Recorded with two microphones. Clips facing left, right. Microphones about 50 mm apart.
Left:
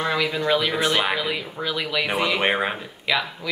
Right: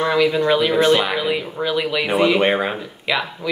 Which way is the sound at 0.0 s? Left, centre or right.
Centre.